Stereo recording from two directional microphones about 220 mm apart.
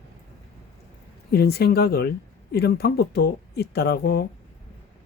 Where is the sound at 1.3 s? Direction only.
45° left (ahead or behind).